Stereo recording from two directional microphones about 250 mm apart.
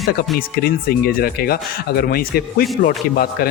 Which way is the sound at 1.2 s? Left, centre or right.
Left.